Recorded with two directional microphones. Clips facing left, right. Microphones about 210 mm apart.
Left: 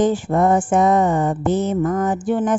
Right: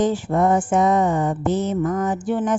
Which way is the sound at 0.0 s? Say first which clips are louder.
Left 2 dB; 50° left (ahead or behind).